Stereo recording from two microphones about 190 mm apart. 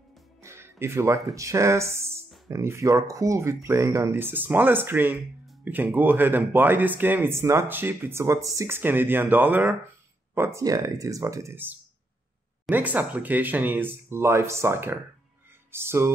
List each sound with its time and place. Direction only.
0.4 s music: 15° right (ahead or behind)
1.3 s speech: 15° right (ahead or behind)